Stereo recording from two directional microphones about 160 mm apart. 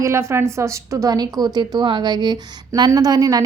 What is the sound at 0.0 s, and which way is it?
A woman's voice, 15° right (ahead or behind).